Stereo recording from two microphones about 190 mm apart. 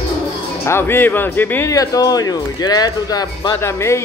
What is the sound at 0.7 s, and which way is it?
Speech, 10° left (ahead or behind).